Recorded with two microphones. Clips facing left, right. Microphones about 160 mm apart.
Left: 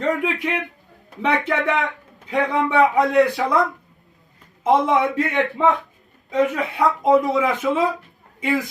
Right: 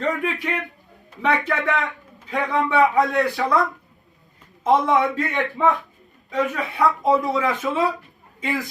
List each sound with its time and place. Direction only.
0.0 s speech: 20° left (ahead or behind)